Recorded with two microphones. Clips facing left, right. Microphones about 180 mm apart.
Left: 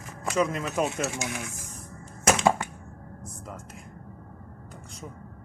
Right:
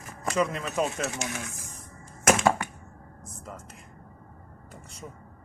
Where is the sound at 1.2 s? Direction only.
15° left (ahead or behind).